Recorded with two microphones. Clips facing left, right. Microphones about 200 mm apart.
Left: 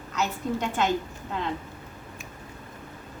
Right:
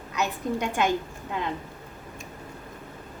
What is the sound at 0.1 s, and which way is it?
Speech, 15° right (ahead or behind).